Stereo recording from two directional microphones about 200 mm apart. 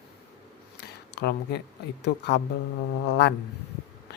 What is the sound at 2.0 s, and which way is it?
Speech, 60° left (ahead or behind).